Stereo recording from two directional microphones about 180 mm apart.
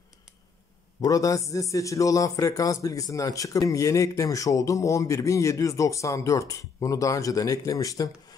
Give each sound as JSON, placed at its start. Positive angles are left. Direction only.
{"t": 1.0, "sound": "speech", "side_deg": 20}